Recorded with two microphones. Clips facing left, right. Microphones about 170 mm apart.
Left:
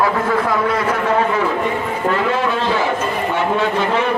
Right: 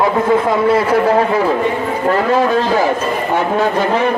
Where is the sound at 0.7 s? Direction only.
35° right (ahead or behind).